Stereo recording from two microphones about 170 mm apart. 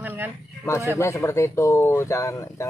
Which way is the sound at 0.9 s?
15° left (ahead or behind).